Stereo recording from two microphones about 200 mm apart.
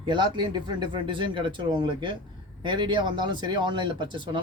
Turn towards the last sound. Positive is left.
turn(degrees=-25)  # may be behind; listen again after turning